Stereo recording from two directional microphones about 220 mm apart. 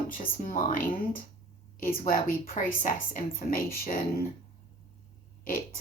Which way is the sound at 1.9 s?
35° left (ahead or behind).